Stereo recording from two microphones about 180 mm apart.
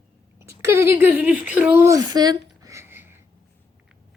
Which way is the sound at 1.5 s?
10° right (ahead or behind).